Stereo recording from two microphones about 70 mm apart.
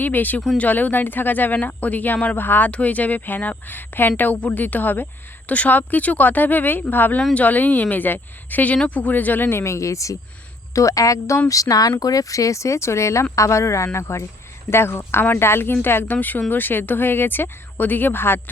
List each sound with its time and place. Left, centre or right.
0.0 s speech: left